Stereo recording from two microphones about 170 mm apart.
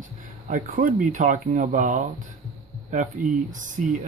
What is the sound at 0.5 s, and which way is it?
Speech, 50° right (ahead or behind).